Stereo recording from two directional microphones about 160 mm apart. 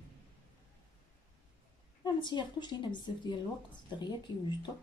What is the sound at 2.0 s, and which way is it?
Speech, 30° left (ahead or behind).